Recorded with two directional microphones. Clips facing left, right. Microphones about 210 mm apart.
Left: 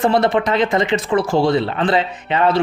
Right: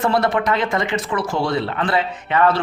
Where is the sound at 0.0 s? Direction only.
20° left (ahead or behind).